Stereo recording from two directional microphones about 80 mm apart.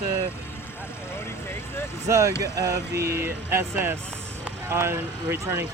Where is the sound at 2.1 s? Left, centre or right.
Right.